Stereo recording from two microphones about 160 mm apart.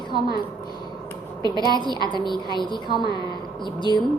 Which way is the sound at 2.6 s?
30° left (ahead or behind).